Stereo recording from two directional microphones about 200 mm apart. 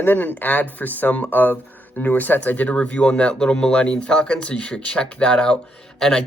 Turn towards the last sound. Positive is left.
turn(degrees=5)  # may be behind; listen again after turning